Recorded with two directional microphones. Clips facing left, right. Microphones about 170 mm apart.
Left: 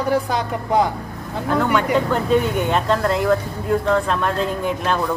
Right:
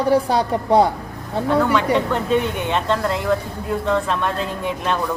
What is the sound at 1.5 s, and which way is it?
Speech, centre (ahead or behind).